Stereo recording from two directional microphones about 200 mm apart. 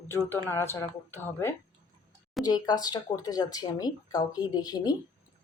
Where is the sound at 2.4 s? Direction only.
20° left (ahead or behind).